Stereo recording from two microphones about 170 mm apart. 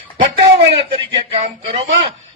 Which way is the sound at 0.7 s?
35° right (ahead or behind).